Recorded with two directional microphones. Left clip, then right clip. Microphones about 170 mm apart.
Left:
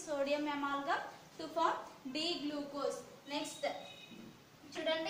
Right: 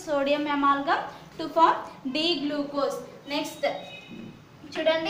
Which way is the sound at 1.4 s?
25° right (ahead or behind).